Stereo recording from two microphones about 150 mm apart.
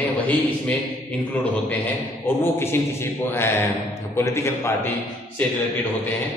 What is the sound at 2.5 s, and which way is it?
A man's voice, 15° left (ahead or behind).